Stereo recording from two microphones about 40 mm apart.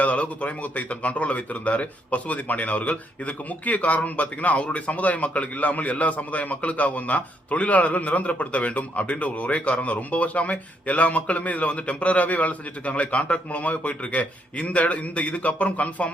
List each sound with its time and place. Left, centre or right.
0.0 s speech: left